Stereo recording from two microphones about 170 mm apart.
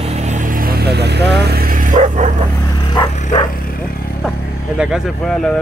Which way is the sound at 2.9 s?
25° left (ahead or behind).